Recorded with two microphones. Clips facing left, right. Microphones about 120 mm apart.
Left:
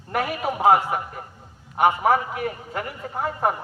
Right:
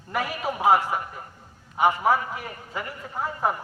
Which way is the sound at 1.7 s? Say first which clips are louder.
Left 2 dB; 60° left (ahead or behind).